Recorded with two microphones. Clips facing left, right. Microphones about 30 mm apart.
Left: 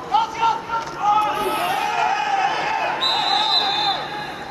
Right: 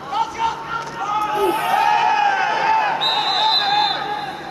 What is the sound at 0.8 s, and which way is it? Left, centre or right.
Run, centre.